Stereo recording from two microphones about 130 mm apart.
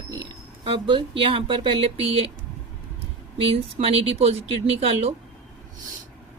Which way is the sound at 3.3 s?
45° right (ahead or behind).